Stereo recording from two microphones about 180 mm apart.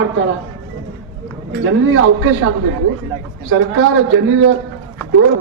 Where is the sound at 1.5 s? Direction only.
90° right.